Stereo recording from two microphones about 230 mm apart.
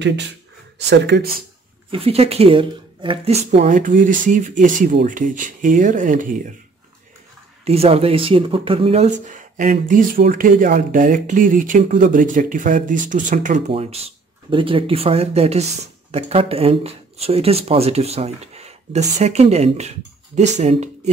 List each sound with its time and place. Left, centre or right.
0.0 s speech: right
1.9 s speech: right
7.6 s speech: right